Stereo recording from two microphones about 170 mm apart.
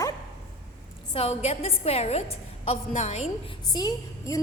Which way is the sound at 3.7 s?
25° left (ahead or behind).